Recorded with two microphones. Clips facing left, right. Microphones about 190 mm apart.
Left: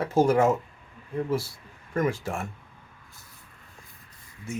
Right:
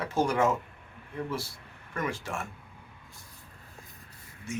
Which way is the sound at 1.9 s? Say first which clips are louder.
Left 6 dB; 40° left (ahead or behind).